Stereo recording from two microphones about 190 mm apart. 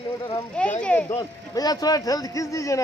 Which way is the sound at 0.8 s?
5° left (ahead or behind).